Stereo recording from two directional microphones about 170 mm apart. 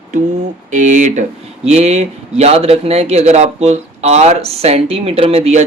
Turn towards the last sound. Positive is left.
turn(degrees=-40)  # may be behind; listen again after turning